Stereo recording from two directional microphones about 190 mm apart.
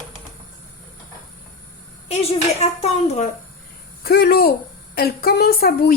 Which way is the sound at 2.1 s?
35° left (ahead or behind).